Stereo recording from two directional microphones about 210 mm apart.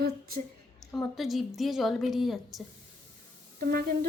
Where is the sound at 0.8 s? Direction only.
Centre (ahead or behind).